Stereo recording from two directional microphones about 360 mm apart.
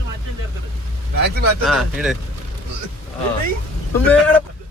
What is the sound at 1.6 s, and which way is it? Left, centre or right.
Speech, centre.